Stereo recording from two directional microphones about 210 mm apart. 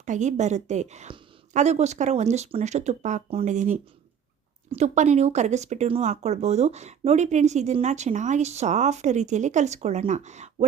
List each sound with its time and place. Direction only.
0.0 s speech: 35° right (ahead or behind)